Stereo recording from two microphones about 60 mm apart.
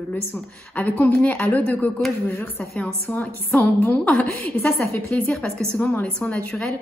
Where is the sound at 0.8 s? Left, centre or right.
Left.